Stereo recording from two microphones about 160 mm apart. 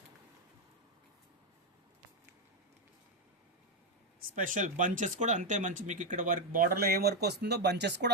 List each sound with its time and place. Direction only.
4.2 s speech: 55° right (ahead or behind); by 8.1 s 90° right